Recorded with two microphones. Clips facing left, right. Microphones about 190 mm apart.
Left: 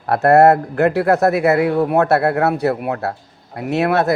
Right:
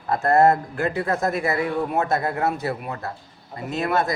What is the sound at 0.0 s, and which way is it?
A man's voice, 70° left (ahead or behind).